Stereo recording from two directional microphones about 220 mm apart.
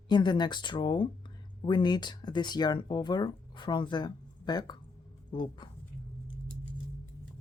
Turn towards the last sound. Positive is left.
turn(degrees=20)  # may be behind; listen again after turning